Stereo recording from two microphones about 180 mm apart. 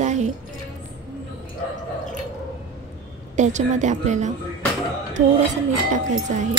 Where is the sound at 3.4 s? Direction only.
40° right (ahead or behind).